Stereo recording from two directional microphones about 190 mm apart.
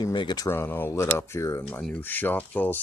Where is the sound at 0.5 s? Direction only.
10° left (ahead or behind).